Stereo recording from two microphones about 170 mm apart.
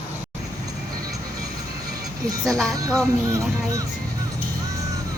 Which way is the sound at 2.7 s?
20° right (ahead or behind).